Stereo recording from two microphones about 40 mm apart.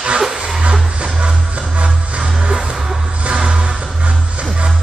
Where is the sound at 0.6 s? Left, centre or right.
Right.